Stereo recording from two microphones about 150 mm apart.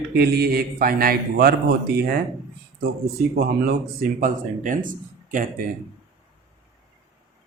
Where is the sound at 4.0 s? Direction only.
60° right (ahead or behind).